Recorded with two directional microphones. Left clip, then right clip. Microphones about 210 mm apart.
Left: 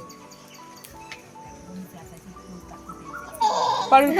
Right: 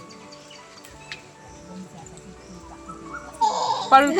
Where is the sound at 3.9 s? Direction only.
Centre (ahead or behind).